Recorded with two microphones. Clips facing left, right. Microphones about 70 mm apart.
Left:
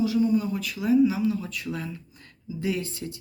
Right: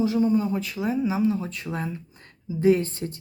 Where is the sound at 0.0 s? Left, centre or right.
Right.